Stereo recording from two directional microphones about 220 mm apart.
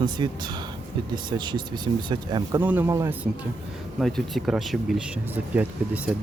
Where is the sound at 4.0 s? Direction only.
Centre (ahead or behind).